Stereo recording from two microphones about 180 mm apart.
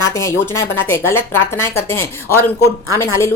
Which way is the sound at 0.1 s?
15° left (ahead or behind).